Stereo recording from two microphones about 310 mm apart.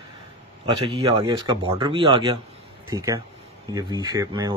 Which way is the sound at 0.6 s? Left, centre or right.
Centre.